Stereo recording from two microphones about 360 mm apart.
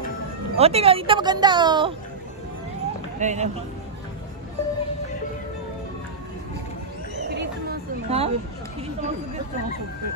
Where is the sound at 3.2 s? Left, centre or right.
Centre.